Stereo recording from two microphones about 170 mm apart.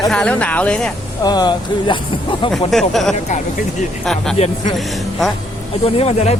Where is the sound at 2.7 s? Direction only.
Centre (ahead or behind).